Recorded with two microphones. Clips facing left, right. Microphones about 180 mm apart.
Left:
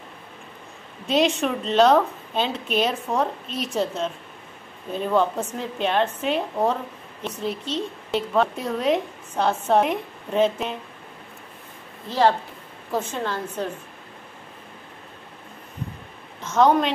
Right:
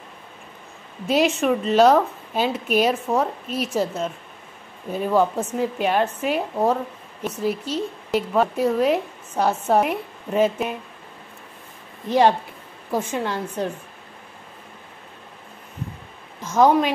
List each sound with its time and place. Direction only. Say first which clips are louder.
1.0 s a woman's voice: right 2 dB; 5° right (ahead or behind)
12.1 s speech: right 3 dB; 15° right (ahead or behind)
16.4 s a woman's voice: right 1 dB; 10° right (ahead or behind)